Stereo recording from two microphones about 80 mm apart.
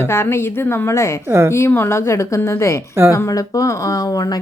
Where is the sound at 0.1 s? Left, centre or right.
Left.